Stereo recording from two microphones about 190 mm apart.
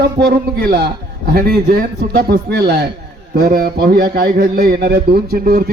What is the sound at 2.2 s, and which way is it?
A man's voice, 55° right (ahead or behind).